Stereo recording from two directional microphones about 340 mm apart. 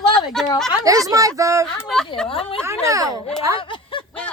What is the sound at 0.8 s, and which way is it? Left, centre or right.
Speech, centre.